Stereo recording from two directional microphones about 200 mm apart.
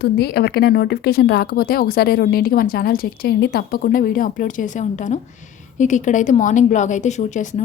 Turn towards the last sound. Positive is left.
turn(degrees=35)  # may be behind; listen again after turning